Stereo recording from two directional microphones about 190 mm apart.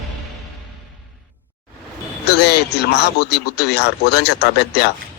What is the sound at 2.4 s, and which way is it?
Speech, 60° left (ahead or behind).